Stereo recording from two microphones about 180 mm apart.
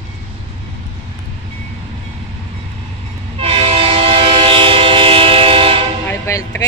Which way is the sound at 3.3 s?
35° right (ahead or behind).